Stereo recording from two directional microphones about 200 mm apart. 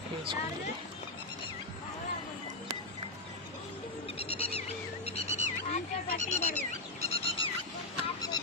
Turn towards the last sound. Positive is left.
turn(degrees=25)  # may be behind; listen again after turning